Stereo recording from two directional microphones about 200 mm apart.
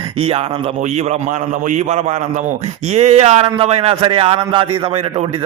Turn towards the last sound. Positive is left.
turn(degrees=-25)  # may be behind; listen again after turning